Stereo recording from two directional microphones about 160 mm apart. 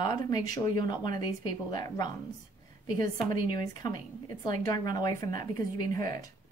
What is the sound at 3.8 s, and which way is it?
A woman's voice, 25° left (ahead or behind).